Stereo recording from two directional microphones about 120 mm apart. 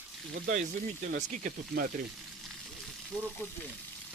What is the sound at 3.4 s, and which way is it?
Speech, 20° left (ahead or behind).